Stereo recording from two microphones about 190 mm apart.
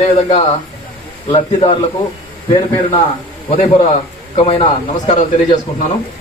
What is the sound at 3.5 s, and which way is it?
A man's voice, 30° left (ahead or behind).